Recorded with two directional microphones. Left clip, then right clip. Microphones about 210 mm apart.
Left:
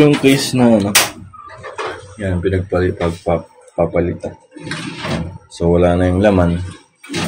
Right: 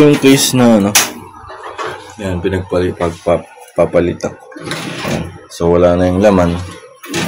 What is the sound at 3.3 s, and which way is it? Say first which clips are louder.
Speech: right 5 dB; 25° right (ahead or behind).